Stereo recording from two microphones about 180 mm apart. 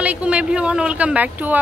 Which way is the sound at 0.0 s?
5° right (ahead or behind).